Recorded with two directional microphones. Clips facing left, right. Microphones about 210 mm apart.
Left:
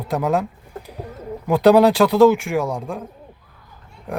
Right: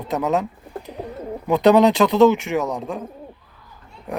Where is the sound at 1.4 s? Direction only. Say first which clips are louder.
Left 1 dB; 5° left (ahead or behind).